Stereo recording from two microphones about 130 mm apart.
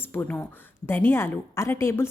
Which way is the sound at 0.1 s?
15° left (ahead or behind).